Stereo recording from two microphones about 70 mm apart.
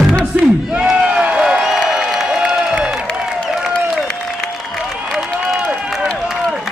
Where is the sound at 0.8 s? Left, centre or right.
Centre.